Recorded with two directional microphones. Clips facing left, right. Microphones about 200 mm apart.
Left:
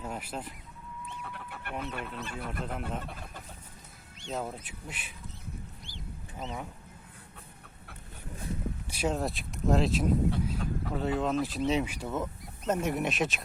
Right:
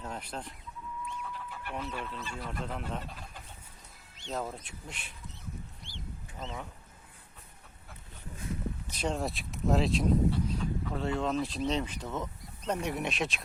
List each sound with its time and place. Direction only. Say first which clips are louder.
0.0 s speech: left 2 dB; 5° left (ahead or behind)
1.2 s vehicle: right 1 dB; 65° left (ahead or behind)
1.8 s speech: left 2 dB; 60° left (ahead or behind)
2.5 s speech: left 1 dB; 5° left (ahead or behind)
4.3 s speech: left 1 dB; centre (ahead or behind)
6.4 s speech: left 2 dB; centre (ahead or behind)
8.9 s speech: left 3 dB; 5° left (ahead or behind)